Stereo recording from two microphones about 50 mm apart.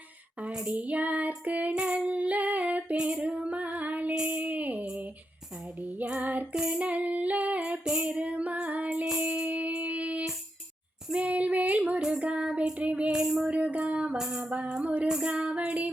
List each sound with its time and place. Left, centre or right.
0.6 s a sound: right
1.5 s child singing: right
1.7 s a sound: right
2.0 s humming: right
2.9 s female singing: right
4.3 s music: right
6.1 s child singing: right
6.5 s music: centre
6.7 s female singing: right
9.1 s music: right
11.1 s child singing: right
13.1 s a sound: centre
14.2 s music: centre
14.7 s a sound: right